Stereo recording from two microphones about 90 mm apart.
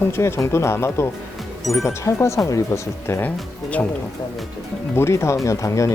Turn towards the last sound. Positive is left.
turn(degrees=35)  # may be behind; listen again after turning